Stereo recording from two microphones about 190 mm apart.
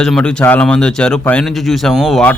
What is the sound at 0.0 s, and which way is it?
Speech, 5° left (ahead or behind).